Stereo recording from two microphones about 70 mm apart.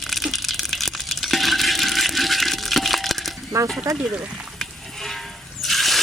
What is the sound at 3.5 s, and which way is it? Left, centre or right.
Speech, right.